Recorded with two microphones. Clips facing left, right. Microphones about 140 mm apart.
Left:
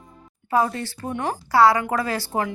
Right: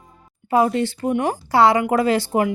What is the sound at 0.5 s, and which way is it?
Speech, 20° right (ahead or behind).